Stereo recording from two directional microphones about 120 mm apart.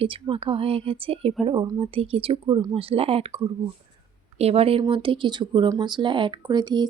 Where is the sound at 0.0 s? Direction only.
50° right (ahead or behind).